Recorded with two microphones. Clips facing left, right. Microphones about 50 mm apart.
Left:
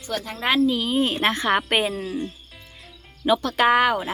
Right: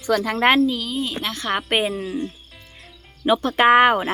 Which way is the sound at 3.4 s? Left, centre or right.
Right.